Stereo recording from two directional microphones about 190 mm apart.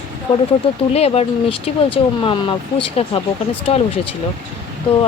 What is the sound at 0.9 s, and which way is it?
Speech, 35° left (ahead or behind).